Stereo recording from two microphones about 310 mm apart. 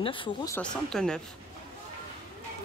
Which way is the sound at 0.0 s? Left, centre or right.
Centre.